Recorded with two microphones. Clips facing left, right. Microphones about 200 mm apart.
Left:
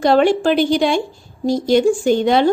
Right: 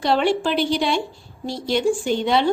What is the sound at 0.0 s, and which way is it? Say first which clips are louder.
Speech: left 6 dB; 45° left (ahead or behind).